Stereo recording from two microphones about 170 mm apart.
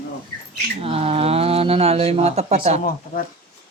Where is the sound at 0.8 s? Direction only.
35° right (ahead or behind).